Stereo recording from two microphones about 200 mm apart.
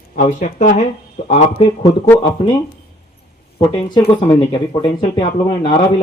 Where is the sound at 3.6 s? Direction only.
20° left (ahead or behind).